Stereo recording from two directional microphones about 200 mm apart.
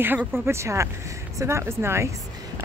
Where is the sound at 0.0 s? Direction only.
10° right (ahead or behind).